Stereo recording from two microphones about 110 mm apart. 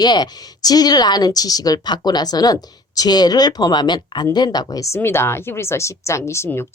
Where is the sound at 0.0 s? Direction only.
40° left (ahead or behind).